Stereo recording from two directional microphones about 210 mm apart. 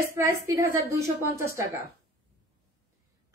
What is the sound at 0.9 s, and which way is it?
Speech, 15° right (ahead or behind).